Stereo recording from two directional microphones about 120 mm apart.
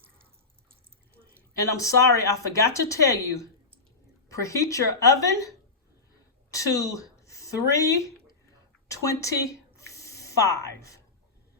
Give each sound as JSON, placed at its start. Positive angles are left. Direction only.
{"t": 1.5, "sound": "speech", "side_deg": 25}
{"t": 4.3, "sound": "a woman's voice", "side_deg": 25}
{"t": 9.7, "sound": "a sound", "side_deg": 25}